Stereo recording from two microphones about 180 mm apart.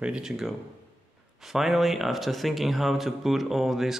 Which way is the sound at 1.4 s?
Centre (ahead or behind).